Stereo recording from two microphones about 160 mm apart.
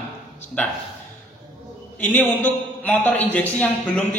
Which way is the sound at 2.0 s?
10° left (ahead or behind).